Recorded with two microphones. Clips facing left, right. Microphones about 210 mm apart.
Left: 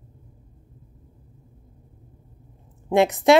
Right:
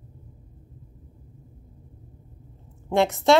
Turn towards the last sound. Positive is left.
turn(degrees=20)  # may be behind; listen again after turning